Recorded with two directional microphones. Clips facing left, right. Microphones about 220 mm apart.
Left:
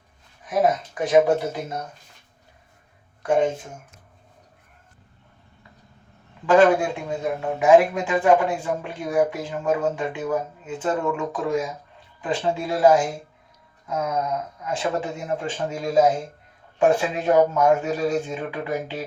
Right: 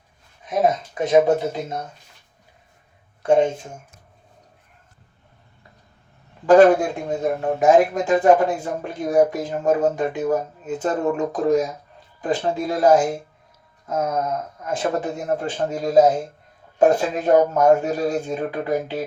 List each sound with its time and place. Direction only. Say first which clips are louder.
0.9 s speech: right 1 dB; 20° right (ahead or behind)
6.4 s speech: right 4 dB; 40° right (ahead or behind)